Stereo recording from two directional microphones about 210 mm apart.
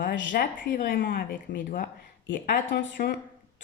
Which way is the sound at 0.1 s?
60° left (ahead or behind).